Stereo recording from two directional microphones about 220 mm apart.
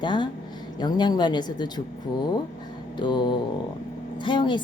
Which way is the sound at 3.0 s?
20° left (ahead or behind).